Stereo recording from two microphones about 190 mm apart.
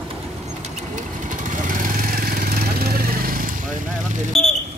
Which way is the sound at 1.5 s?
45° right (ahead or behind).